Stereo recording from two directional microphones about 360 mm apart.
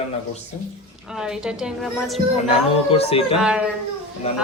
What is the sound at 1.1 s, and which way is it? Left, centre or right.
A woman's voice, centre.